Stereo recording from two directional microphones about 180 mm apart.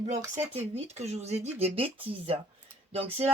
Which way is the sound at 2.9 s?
35° right (ahead or behind).